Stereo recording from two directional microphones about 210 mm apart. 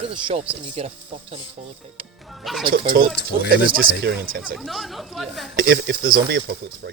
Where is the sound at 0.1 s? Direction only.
25° right (ahead or behind).